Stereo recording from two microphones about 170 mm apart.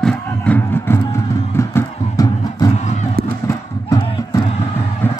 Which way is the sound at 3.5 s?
20° left (ahead or behind).